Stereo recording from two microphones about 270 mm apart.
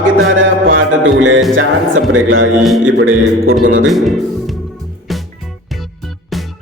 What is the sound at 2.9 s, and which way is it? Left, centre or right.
Music, right.